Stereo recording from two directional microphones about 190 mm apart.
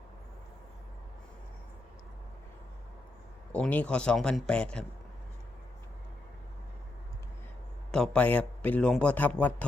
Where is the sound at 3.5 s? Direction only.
5° left (ahead or behind).